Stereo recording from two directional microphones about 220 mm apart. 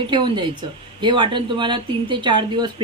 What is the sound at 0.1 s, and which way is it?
A woman's voice, 20° right (ahead or behind).